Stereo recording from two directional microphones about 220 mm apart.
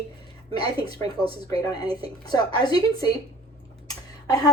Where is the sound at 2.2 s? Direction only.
20° left (ahead or behind).